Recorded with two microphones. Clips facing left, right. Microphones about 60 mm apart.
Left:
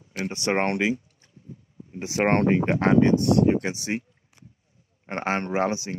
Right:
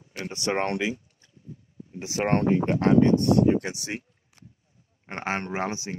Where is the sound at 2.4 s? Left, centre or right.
Left.